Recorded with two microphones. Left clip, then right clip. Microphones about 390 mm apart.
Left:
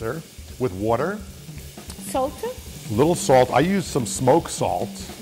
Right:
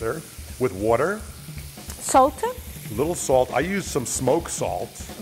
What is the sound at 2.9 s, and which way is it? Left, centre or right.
Speech, left.